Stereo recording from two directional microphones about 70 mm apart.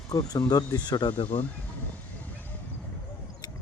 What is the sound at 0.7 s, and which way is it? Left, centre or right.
Speech, left.